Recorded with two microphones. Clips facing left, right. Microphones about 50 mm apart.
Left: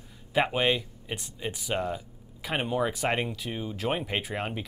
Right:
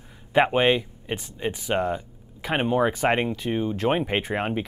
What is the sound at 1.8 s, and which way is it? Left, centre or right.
Speech, centre.